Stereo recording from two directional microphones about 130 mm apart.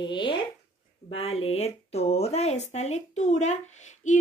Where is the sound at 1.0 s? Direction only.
50° left (ahead or behind).